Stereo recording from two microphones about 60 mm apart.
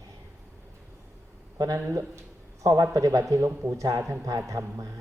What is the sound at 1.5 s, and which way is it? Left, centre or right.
Speech, right.